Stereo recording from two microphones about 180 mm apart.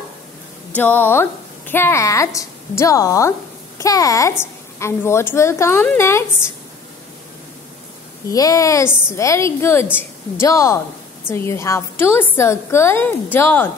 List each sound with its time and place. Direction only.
0.7 s a child's voice: 10° left (ahead or behind)
8.3 s a child's voice: 20° left (ahead or behind)